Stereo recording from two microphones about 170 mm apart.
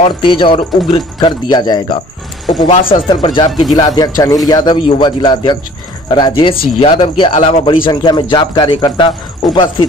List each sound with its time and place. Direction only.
0.0 s a man's voice: 30° left (ahead or behind)
2.7 s speech: 55° left (ahead or behind)
3.1 s a man's voice: 25° left (ahead or behind)